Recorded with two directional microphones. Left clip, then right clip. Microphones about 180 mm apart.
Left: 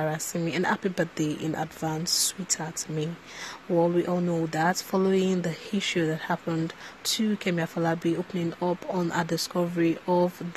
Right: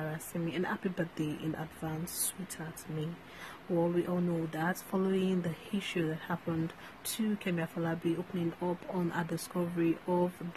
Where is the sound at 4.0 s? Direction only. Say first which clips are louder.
Left 7 dB; 30° left (ahead or behind).